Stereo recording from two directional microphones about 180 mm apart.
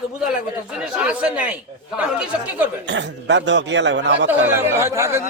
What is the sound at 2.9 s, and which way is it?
A man's voice, 80° right.